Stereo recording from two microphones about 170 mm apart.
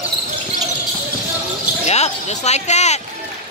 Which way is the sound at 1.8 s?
40° left (ahead or behind).